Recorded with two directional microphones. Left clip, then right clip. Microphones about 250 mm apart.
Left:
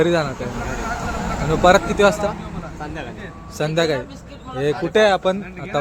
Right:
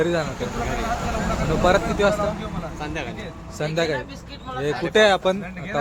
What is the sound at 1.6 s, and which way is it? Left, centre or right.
Speech, centre.